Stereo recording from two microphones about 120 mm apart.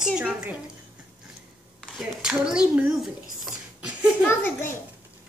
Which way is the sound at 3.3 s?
5° right (ahead or behind).